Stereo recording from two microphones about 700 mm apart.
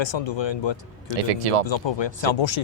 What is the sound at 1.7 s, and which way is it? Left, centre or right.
Speech, left.